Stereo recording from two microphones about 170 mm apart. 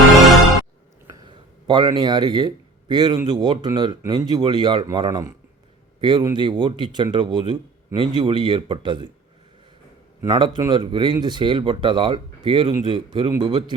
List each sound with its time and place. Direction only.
1.1 s a sound: 25° right (ahead or behind)
2.9 s speech: 25° right (ahead or behind)
10.2 s speech: 25° right (ahead or behind)